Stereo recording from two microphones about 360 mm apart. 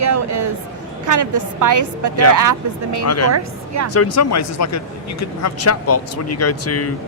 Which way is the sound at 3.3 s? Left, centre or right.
Right.